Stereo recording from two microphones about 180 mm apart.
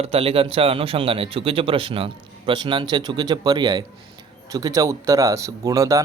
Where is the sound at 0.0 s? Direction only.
30° right (ahead or behind).